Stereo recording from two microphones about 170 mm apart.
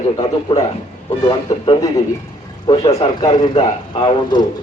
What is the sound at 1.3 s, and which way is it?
A man's voice, 30° left (ahead or behind).